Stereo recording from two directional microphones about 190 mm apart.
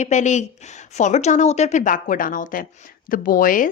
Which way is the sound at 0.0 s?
40° left (ahead or behind).